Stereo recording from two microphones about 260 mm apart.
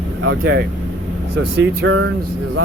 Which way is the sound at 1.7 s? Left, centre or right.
Right.